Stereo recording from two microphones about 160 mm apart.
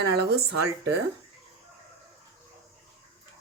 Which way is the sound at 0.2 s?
85° right.